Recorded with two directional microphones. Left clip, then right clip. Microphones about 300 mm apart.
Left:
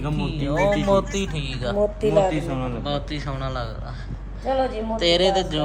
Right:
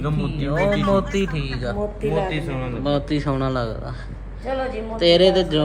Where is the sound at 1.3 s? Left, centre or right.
Left.